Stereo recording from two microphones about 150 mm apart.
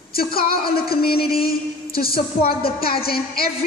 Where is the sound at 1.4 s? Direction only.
90° left.